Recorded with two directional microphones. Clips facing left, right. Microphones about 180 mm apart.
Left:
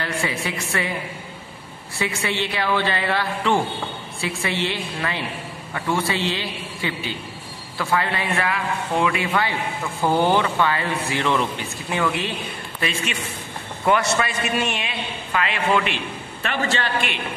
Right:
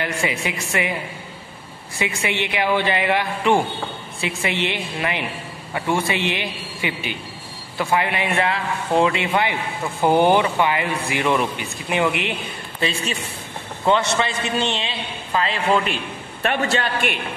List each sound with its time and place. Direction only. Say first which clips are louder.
0.0 s a woman's voice: right 2 dB; 15° right (ahead or behind)
2.0 s a woman's voice: right 1 dB; 15° right (ahead or behind)
12.8 s a man's voice: right 2 dB; 35° right (ahead or behind)
13.8 s a man's voice: right 1 dB; 25° right (ahead or behind)
16.4 s a man's voice: right 3 dB; 55° right (ahead or behind)